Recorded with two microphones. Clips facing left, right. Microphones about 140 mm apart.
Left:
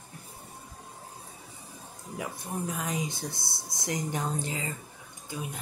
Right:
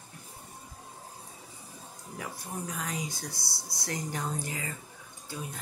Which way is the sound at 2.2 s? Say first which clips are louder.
Left 4 dB; 20° left (ahead or behind).